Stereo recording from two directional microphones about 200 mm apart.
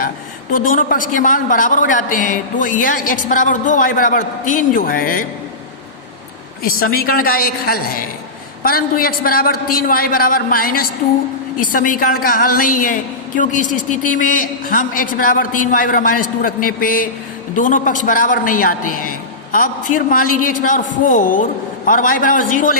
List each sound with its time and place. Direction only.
0.5 s a woman's voice: 45° left (ahead or behind)
6.6 s a woman's voice: 45° left (ahead or behind)